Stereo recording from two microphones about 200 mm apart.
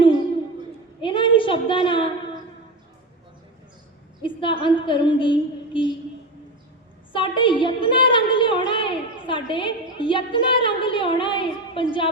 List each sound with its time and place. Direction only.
1.0 s a sound: 25° left (ahead or behind)
4.2 s a woman's voice: 25° left (ahead or behind)
7.1 s a woman's voice: 25° left (ahead or behind)